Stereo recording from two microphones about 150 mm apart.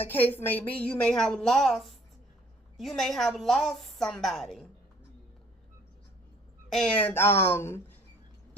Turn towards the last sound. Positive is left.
turn(degrees=15)  # may be behind; listen again after turning